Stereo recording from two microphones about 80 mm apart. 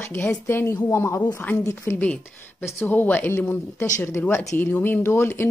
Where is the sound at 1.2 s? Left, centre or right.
Left.